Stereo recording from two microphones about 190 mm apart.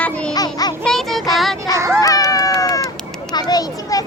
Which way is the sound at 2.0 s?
20° left (ahead or behind).